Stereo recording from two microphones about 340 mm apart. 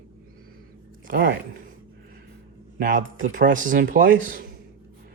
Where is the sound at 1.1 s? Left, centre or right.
Right.